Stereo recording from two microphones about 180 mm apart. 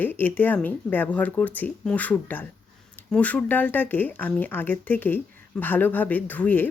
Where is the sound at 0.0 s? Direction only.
10° left (ahead or behind).